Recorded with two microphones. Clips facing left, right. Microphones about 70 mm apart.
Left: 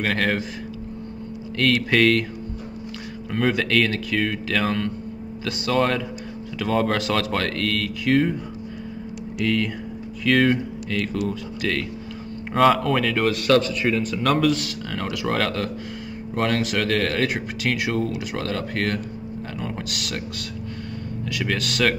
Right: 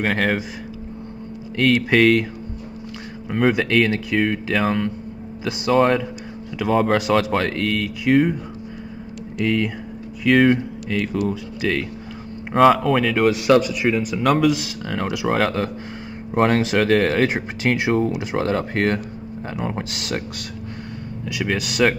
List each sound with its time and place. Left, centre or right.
0.0 s a man's voice: centre
1.6 s speech: centre
3.3 s a man's voice: centre
9.4 s a man's voice: centre
21.3 s a man's voice: centre